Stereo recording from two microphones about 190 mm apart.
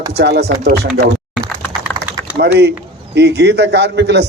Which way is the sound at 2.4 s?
60° right (ahead or behind).